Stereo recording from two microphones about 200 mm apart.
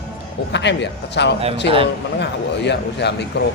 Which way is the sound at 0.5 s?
60° left (ahead or behind).